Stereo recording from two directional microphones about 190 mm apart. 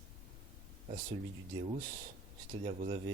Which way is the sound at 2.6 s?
30° right (ahead or behind).